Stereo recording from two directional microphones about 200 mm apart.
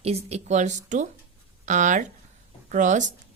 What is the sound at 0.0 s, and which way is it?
Speech, 30° right (ahead or behind).